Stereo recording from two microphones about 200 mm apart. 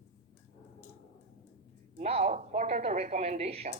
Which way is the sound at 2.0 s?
35° right (ahead or behind).